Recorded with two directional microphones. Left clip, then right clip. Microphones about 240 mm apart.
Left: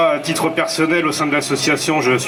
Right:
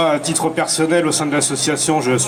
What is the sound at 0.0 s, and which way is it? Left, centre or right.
Speech, right.